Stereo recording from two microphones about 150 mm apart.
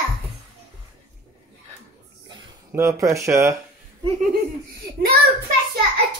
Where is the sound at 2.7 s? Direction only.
20° right (ahead or behind).